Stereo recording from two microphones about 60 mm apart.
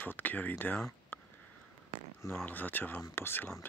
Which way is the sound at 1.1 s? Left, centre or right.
Left.